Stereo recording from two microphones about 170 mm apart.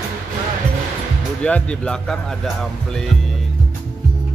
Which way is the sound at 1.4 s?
5° left (ahead or behind).